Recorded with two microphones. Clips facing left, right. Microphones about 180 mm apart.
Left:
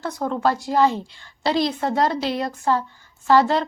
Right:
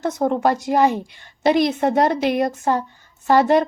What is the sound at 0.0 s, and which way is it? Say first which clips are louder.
A woman's voice: right 4 dB; 20° right (ahead or behind).